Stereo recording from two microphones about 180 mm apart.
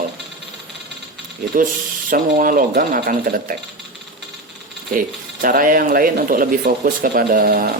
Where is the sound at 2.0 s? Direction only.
50° right (ahead or behind).